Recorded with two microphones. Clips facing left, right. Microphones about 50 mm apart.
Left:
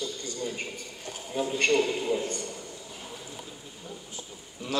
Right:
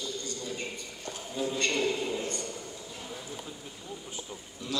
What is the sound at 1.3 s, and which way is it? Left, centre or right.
Speech, left.